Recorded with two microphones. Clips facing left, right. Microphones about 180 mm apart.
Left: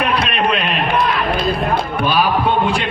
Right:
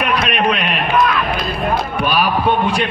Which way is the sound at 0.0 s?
30° left (ahead or behind).